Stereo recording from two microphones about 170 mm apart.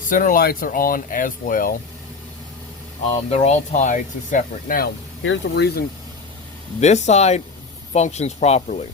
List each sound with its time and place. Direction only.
0.1 s speech: 50° left (ahead or behind)
3.2 s speech: 40° left (ahead or behind)
5.3 s speech: 80° left
6.7 s speech: 40° left (ahead or behind)